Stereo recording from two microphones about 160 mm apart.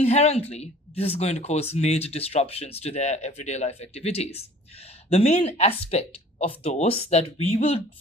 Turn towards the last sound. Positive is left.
turn(degrees=40)  # may be behind; listen again after turning